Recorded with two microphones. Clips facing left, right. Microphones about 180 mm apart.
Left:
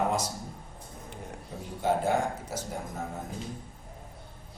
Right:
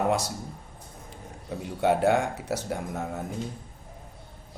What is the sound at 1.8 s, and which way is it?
Speech, 70° right (ahead or behind).